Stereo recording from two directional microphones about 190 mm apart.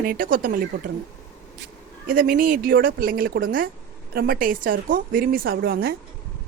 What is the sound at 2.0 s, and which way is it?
A woman's voice, 50° right (ahead or behind).